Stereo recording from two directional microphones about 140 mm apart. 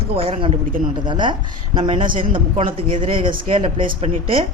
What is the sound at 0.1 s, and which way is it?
Speech, 40° right (ahead or behind).